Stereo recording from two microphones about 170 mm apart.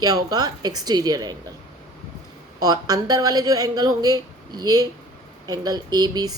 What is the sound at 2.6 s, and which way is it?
A woman's voice, 20° right (ahead or behind).